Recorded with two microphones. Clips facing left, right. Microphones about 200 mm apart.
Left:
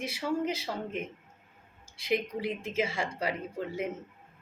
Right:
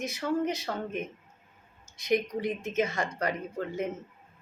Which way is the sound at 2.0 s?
5° left (ahead or behind).